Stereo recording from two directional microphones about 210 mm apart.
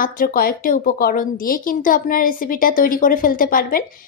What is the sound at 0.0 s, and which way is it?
A woman's voice, 45° left (ahead or behind).